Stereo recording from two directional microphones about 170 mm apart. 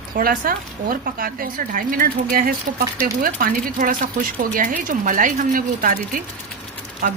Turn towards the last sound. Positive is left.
turn(degrees=-55)  # may be behind; listen again after turning